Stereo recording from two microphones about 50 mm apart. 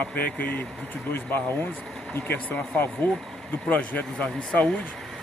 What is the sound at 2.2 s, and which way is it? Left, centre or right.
Speech, left.